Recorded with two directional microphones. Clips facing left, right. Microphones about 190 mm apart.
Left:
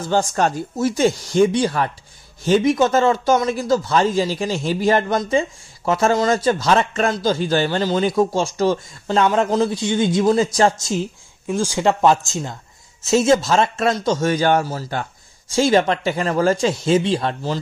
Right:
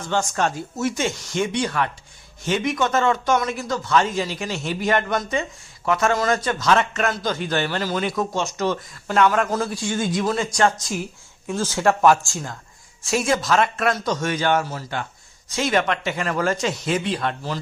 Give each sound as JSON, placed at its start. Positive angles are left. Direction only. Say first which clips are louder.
{"t": 0.0, "sound": "a man's voice", "louder": "left 4 dB", "side_deg": 30}
{"t": 11.5, "sound": "a man's voice", "louder": "left 2 dB", "side_deg": 15}